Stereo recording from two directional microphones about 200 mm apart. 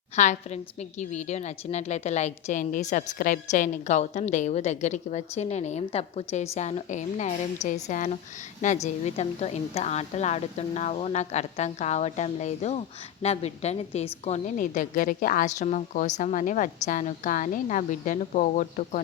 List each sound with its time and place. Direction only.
0.2 s a woman's voice: 35° left (ahead or behind)